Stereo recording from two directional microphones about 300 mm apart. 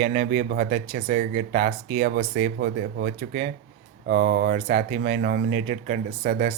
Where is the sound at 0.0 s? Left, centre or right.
Right.